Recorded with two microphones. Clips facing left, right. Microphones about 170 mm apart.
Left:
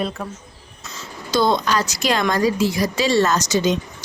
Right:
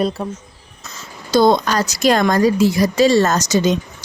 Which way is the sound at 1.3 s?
45° right (ahead or behind).